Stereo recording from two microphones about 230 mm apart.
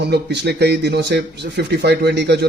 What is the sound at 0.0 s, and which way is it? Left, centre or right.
Speech, right.